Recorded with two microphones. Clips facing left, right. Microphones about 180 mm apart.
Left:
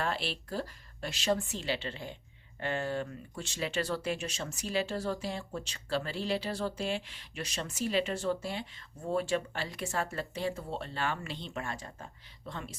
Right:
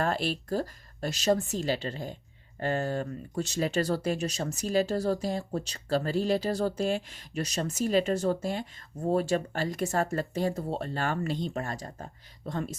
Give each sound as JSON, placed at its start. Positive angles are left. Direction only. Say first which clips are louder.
{"t": 0.0, "sound": "speech", "louder": "right 6 dB", "side_deg": -45}